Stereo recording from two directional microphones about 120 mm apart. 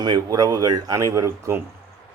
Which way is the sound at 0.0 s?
35° right (ahead or behind).